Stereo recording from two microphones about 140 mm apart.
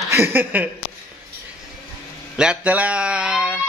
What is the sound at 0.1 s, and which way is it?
Speech, 15° right (ahead or behind).